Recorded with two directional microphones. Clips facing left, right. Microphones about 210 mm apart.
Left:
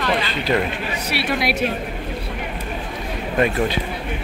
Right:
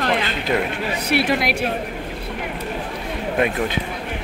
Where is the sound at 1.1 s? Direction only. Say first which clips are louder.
Right 4 dB; 50° right (ahead or behind).